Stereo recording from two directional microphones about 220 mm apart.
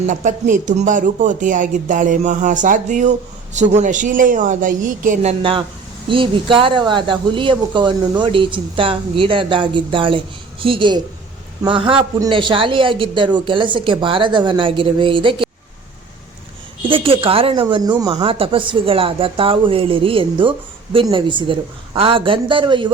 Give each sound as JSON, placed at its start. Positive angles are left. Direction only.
{"t": 0.0, "sound": "a man's voice", "side_deg": -35}
{"t": 16.9, "sound": "a man's voice", "side_deg": -25}